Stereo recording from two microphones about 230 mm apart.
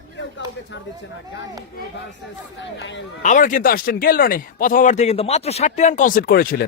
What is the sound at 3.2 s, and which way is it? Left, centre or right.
Speech, left.